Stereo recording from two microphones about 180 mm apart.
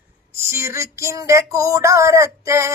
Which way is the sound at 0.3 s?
15° right (ahead or behind).